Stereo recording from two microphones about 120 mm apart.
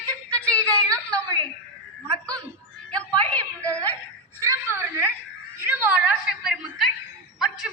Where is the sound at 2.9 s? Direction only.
10° left (ahead or behind).